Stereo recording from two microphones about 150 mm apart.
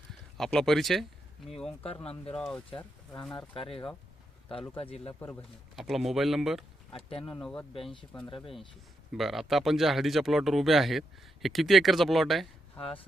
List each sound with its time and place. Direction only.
0.3 s speech: 5° left (ahead or behind)
2.3 s speech: centre (ahead or behind)
3.5 s speech: 35° left (ahead or behind)
5.7 s speech: centre (ahead or behind)
6.9 s speech: 40° left (ahead or behind)
7.4 s speech: 5° left (ahead or behind)
9.1 s speech: centre (ahead or behind)
12.8 s speech: 35° left (ahead or behind)